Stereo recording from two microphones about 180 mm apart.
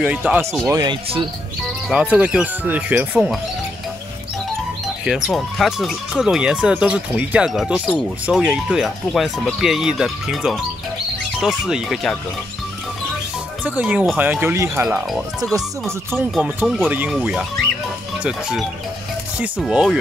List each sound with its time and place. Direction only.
0.0 s speech: 5° right (ahead or behind)
0.7 s speech: 25° right (ahead or behind)
1.9 s speech: 5° right (ahead or behind)
5.0 s speech: centre (ahead or behind)
13.7 s speech: 10° right (ahead or behind)
15.0 s speech: centre (ahead or behind)